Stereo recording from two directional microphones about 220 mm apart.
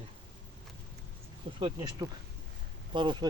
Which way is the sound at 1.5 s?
25° right (ahead or behind).